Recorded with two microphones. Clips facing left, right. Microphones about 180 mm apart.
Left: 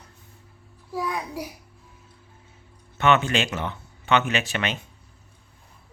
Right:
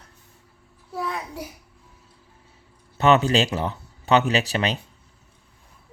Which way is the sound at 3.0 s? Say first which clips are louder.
Right 3 dB; 35° right (ahead or behind).